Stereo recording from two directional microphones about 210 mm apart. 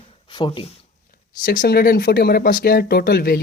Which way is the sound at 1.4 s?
45° left (ahead or behind).